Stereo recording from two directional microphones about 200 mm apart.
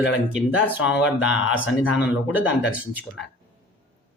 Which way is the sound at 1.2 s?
75° left (ahead or behind).